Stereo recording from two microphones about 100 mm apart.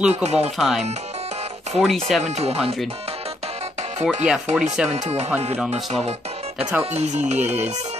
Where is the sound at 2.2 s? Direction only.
90° right.